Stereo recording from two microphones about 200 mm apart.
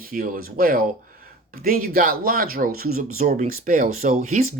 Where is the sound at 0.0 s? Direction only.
45° right (ahead or behind).